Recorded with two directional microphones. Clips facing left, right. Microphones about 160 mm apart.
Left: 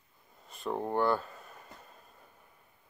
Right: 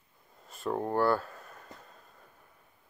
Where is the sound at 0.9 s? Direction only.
20° left (ahead or behind).